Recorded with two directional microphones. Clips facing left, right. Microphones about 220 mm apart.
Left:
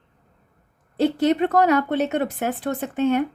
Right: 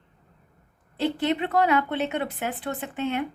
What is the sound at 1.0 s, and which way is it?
Speech, 40° left (ahead or behind).